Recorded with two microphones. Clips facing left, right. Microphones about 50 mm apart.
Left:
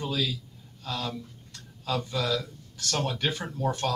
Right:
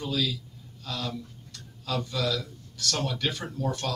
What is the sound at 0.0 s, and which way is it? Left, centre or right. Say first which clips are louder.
A man's voice: right 1 dB; left.